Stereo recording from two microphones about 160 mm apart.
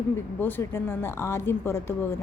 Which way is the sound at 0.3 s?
15° left (ahead or behind).